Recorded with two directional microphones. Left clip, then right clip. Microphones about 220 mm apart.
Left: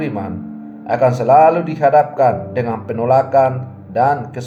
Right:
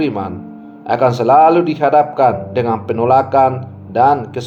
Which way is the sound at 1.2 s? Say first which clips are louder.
Right 1 dB; 35° right (ahead or behind).